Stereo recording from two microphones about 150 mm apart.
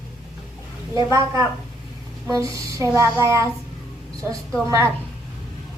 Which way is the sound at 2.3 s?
20° right (ahead or behind).